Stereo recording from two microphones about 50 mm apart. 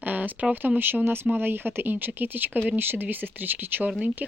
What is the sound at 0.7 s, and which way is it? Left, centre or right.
Speech, right.